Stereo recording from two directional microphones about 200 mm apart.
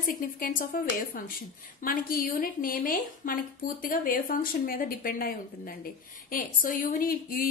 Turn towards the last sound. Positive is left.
turn(degrees=45)  # may be behind; listen again after turning